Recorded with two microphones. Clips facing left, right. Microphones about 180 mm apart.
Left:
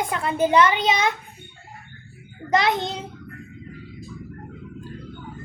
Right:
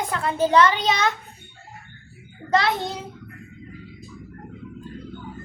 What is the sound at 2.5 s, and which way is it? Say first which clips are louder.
Speech: left 1 dB; 20° left (ahead or behind).